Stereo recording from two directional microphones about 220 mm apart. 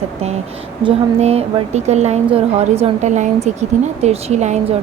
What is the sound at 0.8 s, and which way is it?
A woman's voice, 30° right (ahead or behind).